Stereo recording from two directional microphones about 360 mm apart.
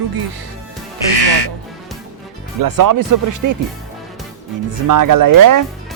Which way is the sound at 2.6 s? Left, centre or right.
Right.